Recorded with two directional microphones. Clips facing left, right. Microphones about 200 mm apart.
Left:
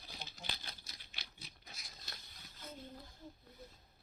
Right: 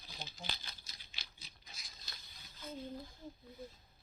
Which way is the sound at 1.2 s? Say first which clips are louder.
Left 3 dB; 60° left (ahead or behind).